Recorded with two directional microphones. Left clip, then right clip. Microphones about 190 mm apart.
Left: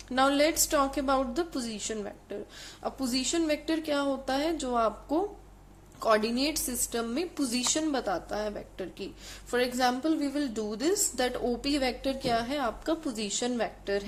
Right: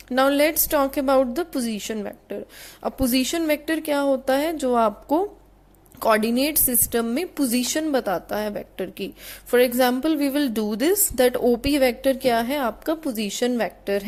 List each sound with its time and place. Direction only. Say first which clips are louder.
0.1 s a woman's voice: right 6 dB; 30° right (ahead or behind)